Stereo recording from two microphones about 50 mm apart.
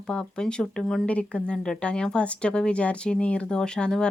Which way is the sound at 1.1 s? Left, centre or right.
Left.